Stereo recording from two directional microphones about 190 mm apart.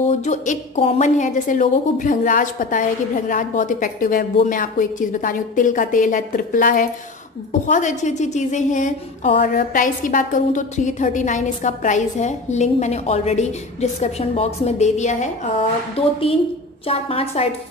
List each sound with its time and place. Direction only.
0.2 s a woman's voice: 35° left (ahead or behind)
16.8 s a woman's voice: 30° left (ahead or behind)